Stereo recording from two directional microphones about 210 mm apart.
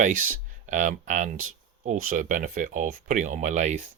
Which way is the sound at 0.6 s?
35° right (ahead or behind).